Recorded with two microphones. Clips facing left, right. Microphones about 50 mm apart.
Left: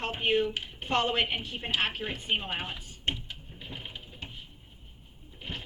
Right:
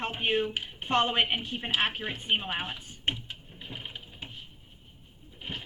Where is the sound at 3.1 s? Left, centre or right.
Centre.